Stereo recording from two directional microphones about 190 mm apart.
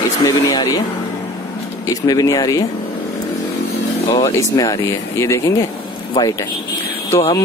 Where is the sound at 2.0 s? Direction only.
20° left (ahead or behind).